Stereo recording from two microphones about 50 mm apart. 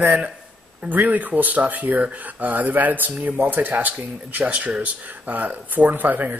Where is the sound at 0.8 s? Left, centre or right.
Right.